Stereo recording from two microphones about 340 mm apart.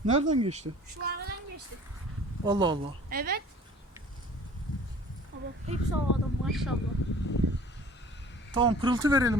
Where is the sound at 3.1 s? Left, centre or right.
Right.